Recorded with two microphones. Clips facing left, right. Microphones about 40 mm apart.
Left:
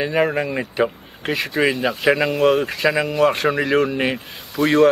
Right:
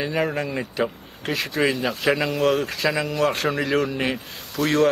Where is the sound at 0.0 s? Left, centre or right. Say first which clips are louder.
Left 5 dB; centre.